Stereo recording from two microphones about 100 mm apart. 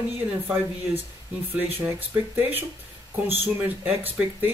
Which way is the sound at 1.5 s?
20° right (ahead or behind).